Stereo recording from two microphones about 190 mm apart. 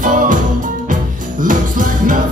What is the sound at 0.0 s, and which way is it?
Music, 45° right (ahead or behind).